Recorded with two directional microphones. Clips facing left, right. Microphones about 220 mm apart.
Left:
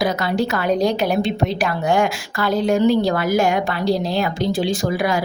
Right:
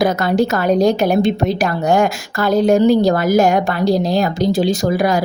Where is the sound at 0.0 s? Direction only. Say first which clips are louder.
Right 5 dB; 50° right (ahead or behind).